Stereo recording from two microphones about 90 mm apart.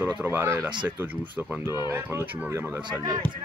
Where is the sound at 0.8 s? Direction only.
20° right (ahead or behind).